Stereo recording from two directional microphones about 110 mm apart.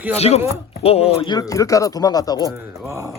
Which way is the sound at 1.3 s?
35° left (ahead or behind).